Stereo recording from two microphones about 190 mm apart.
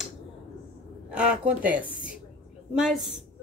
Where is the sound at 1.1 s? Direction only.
5° right (ahead or behind).